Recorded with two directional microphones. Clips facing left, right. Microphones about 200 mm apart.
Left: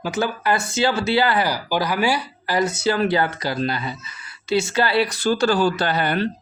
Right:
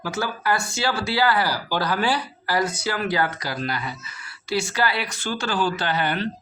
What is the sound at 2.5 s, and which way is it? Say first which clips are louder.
Speech: left 4 dB; 25° left (ahead or behind).